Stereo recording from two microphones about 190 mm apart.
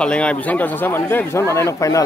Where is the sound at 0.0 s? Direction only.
5° left (ahead or behind).